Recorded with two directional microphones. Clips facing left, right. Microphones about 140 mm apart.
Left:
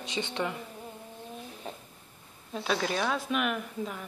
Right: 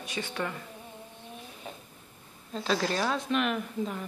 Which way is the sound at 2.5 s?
5° left (ahead or behind).